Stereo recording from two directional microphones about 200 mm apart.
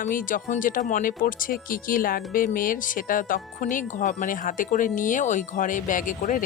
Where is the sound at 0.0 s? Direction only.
40° left (ahead or behind).